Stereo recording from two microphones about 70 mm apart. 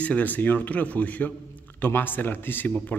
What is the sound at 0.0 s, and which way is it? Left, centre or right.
Speech, left.